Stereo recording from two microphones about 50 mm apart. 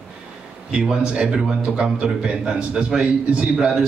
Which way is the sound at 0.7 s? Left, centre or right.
Centre.